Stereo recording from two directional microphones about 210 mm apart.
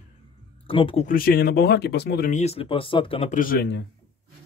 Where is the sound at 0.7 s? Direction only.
25° left (ahead or behind).